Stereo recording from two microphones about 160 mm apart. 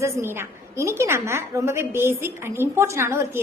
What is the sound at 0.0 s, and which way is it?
A woman's voice, 15° right (ahead or behind).